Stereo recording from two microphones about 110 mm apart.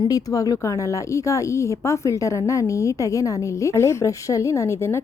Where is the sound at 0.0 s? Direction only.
35° left (ahead or behind).